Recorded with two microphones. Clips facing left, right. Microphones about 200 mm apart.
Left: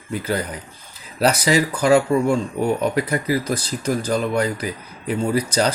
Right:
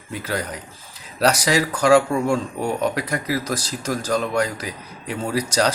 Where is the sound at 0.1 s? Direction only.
Centre (ahead or behind).